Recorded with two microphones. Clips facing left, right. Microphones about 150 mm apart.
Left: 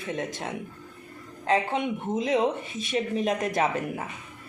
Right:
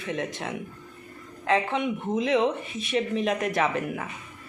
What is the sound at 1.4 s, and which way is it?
Speech, 45° left (ahead or behind).